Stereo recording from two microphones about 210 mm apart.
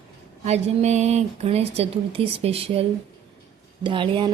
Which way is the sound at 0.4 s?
30° right (ahead or behind).